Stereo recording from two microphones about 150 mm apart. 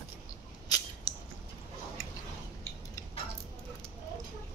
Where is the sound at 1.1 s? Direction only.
25° left (ahead or behind).